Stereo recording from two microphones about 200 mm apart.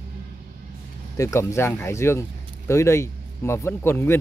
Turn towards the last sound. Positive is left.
turn(degrees=10)  # may be behind; listen again after turning